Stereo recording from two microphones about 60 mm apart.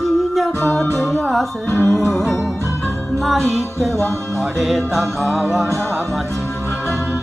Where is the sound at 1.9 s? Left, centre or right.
Centre.